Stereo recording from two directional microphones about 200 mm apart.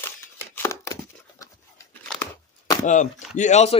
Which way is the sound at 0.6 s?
15° left (ahead or behind).